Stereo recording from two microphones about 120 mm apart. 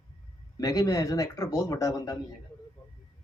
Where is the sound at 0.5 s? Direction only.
30° left (ahead or behind).